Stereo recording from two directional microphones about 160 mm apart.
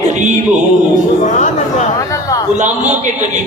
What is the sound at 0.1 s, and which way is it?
Music, 45° right (ahead or behind).